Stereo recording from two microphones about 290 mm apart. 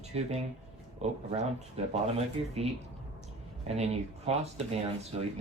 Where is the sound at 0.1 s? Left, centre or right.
Right.